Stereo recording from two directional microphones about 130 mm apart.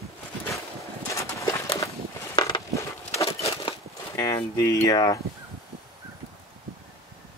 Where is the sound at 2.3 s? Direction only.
30° left (ahead or behind).